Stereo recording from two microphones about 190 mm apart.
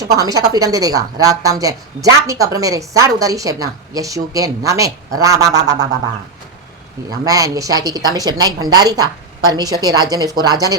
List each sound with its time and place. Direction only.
0.0 s a woman's voice: 20° right (ahead or behind)
7.1 s a woman's voice: 20° right (ahead or behind)